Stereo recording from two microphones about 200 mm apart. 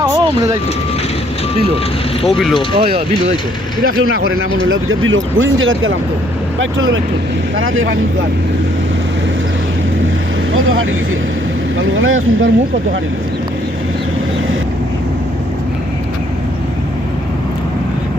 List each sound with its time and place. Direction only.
0.0 s vehicle: 15° right (ahead or behind)
2.2 s speech: centre (ahead or behind)
2.7 s speech: 30° right (ahead or behind)
3.8 s speech: 90° right
11.8 s speech: 85° right